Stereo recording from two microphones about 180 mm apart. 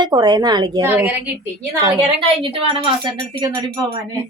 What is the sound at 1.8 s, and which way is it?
A woman's voice, 30° right (ahead or behind).